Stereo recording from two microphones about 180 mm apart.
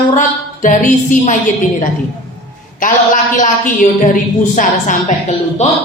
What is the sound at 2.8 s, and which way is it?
A woman's voice, 45° left (ahead or behind).